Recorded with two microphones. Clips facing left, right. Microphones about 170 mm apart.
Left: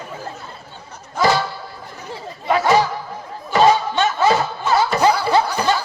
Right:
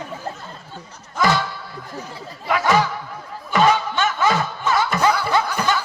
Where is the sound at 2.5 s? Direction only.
35° left (ahead or behind).